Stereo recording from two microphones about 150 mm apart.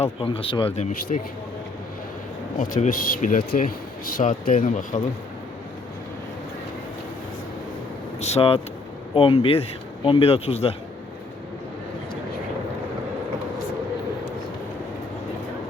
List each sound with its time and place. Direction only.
0.0 s speech: 35° left (ahead or behind)
0.8 s speech: 50° left (ahead or behind)
2.6 s speech: 60° left (ahead or behind)
8.2 s speech: 45° left (ahead or behind)